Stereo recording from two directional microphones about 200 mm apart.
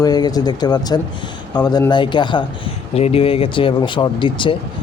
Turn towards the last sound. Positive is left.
turn(degrees=25)  # may be behind; listen again after turning